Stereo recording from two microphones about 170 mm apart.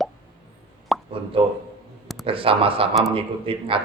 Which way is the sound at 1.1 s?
30° right (ahead or behind).